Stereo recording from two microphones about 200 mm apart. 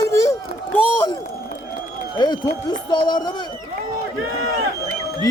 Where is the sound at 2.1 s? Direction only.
20° left (ahead or behind).